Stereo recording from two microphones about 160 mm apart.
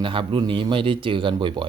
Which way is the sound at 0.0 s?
35° right (ahead or behind).